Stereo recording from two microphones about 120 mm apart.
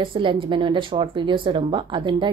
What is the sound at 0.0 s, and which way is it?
Speech, 45° right (ahead or behind).